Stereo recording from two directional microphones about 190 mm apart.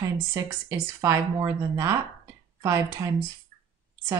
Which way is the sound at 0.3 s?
15° right (ahead or behind).